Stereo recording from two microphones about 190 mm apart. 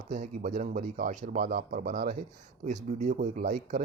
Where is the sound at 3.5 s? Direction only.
55° right (ahead or behind).